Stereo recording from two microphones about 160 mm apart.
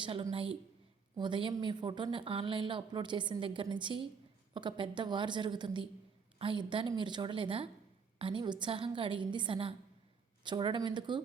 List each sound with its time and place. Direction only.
0.0 s a woman's voice: 35° right (ahead or behind)